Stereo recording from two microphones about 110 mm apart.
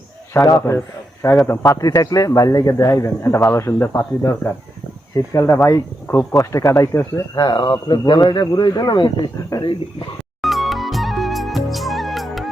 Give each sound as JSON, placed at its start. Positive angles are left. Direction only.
{"t": 0.4, "sound": "a man's voice", "side_deg": 30}
{"t": 7.3, "sound": "speech", "side_deg": 45}
{"t": 10.4, "sound": "music", "side_deg": 0}